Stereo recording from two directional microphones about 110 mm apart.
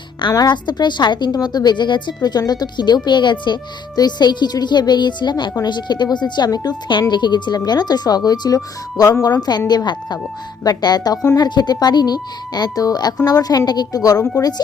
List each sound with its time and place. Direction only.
0.3 s a woman's voice: 35° left (ahead or behind)